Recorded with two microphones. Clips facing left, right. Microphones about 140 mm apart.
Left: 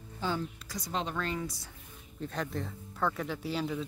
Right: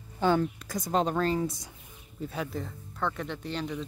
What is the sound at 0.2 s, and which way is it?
Speech, 60° right (ahead or behind).